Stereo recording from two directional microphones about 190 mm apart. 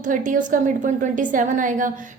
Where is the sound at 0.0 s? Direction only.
45° right (ahead or behind).